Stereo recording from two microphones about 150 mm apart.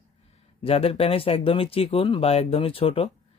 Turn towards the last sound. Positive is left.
turn(degrees=40)  # may be behind; listen again after turning